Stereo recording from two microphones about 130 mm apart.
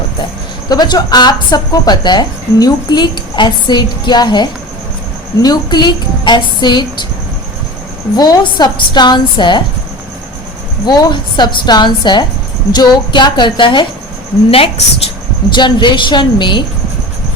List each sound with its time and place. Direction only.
0.7 s speech: 30° left (ahead or behind)
8.1 s speech: 30° left (ahead or behind)
10.8 s speech: 35° left (ahead or behind)
14.5 s speech: 50° left (ahead or behind)